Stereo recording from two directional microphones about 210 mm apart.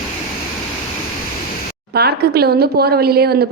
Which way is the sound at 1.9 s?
50° right (ahead or behind).